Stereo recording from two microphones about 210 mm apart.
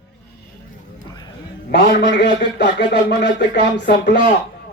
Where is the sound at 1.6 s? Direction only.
55° left (ahead or behind).